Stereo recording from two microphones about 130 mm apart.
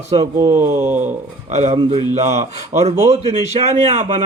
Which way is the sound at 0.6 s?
55° right (ahead or behind).